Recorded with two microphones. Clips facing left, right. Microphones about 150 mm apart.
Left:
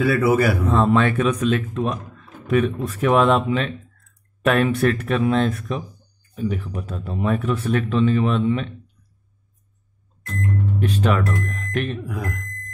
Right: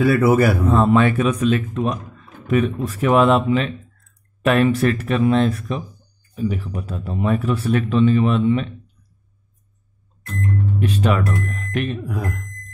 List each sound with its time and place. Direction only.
0.0 s a man's voice: 40° right (ahead or behind)
0.7 s speech: 10° right (ahead or behind)
10.8 s speech: 5° right (ahead or behind)